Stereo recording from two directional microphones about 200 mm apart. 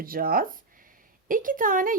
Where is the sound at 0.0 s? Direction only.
45° right (ahead or behind).